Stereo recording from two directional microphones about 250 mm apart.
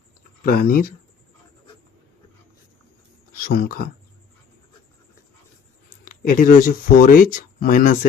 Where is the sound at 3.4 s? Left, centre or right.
Left.